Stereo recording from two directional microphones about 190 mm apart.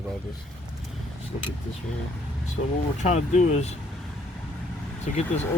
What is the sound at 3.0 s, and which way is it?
Speech, 40° left (ahead or behind).